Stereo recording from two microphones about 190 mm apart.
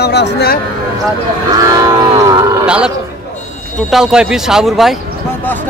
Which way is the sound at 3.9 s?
5° right (ahead or behind).